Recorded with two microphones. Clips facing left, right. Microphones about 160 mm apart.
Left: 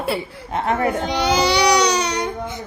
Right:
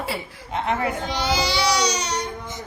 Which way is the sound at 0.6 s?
45° left (ahead or behind).